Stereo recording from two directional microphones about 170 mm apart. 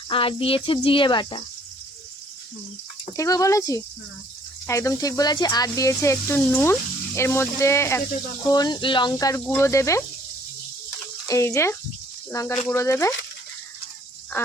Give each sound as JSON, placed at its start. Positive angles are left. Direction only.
{"t": 0.1, "sound": "speech", "side_deg": 30}
{"t": 3.1, "sound": "speech", "side_deg": 20}
{"t": 9.1, "sound": "speech", "side_deg": 15}
{"t": 11.3, "sound": "speech", "side_deg": 15}